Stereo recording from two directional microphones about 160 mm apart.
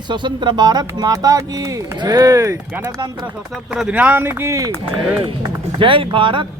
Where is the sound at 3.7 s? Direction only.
10° right (ahead or behind).